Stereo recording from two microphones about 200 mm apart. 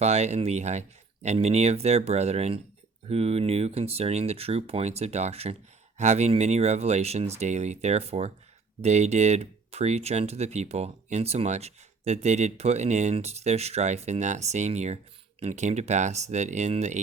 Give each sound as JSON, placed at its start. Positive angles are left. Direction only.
{"t": 0.0, "sound": "speech", "side_deg": -35}